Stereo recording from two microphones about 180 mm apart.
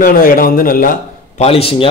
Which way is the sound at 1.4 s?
30° left (ahead or behind).